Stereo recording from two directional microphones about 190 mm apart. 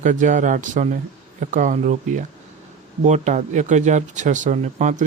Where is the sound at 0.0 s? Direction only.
40° right (ahead or behind).